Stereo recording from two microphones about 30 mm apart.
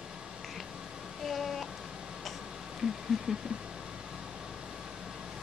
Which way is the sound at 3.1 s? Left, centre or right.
Centre.